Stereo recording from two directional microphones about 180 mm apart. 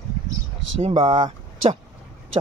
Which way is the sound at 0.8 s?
30° right (ahead or behind).